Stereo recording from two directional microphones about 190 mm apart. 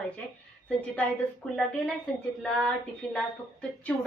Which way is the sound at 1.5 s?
5° left (ahead or behind).